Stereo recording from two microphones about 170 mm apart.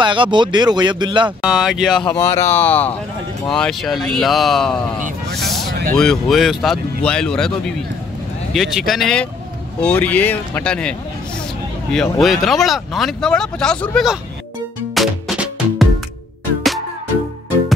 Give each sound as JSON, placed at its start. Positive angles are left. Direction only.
{"t": 0.0, "sound": "speech", "side_deg": -30}
{"t": 1.4, "sound": "speech", "side_deg": -5}
{"t": 2.1, "sound": "speech", "side_deg": 20}
{"t": 5.3, "sound": "a sound", "side_deg": 0}
{"t": 5.9, "sound": "speech", "side_deg": 0}
{"t": 15.0, "sound": "music", "side_deg": 0}